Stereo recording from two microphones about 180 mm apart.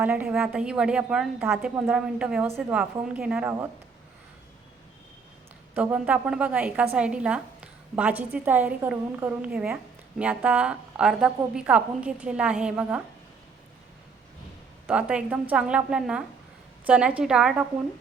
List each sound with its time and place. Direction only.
0.0 s a woman's voice: 10° right (ahead or behind)
5.7 s a woman's voice: 10° right (ahead or behind)
14.8 s a woman's voice: 5° right (ahead or behind)